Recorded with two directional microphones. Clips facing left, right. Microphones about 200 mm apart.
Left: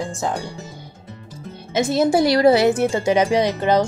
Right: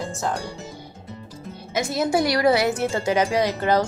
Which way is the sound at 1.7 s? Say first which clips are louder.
Left 5 dB; 25° left (ahead or behind).